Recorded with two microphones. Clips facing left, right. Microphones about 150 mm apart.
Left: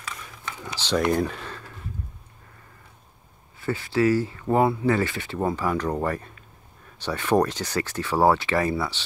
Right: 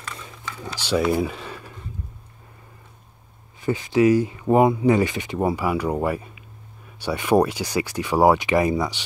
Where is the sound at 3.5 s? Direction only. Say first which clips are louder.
Right 4 dB; 20° right (ahead or behind).